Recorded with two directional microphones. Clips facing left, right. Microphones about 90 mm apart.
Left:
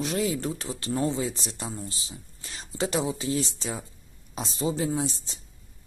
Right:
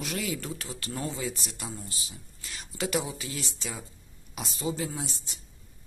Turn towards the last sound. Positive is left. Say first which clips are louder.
# left 9 dB
turn(degrees=30)  # may be behind; listen again after turning